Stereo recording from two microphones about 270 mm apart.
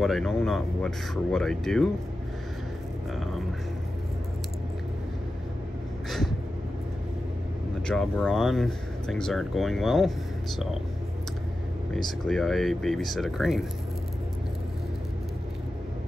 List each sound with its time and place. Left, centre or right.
0.0 s speech: centre
6.0 s a sound: centre
7.8 s speech: centre
12.3 s speech: centre